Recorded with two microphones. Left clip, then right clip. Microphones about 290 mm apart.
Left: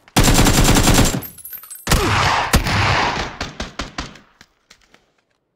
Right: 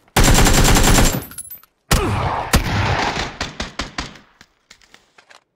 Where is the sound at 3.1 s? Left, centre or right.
Centre.